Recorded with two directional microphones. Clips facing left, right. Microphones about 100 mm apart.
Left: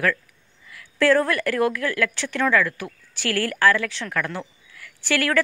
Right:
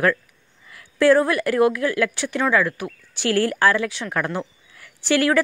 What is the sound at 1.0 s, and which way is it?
A woman's voice, 15° right (ahead or behind).